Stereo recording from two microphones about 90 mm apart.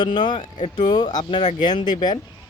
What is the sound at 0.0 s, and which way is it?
Speech, 55° left (ahead or behind).